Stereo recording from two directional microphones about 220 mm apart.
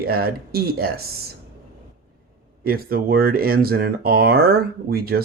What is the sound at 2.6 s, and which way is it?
Speech, 45° right (ahead or behind).